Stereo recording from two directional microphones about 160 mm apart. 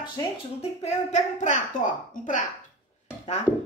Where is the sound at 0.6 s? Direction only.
40° left (ahead or behind).